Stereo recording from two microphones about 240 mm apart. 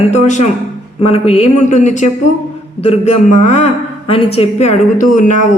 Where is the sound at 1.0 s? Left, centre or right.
Left.